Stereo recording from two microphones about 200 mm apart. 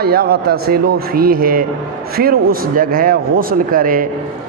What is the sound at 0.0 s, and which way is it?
A man's voice, 50° right (ahead or behind).